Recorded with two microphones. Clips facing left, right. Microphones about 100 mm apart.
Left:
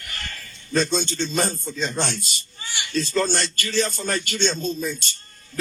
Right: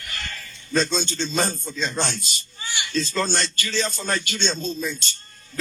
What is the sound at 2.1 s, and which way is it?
A man's voice, 50° left (ahead or behind).